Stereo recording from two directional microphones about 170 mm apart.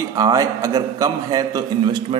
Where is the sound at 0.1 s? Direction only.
20° right (ahead or behind).